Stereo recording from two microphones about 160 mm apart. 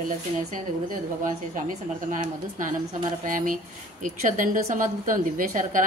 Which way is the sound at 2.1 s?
50° right (ahead or behind).